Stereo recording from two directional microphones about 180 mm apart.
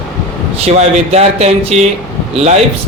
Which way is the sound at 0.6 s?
35° right (ahead or behind).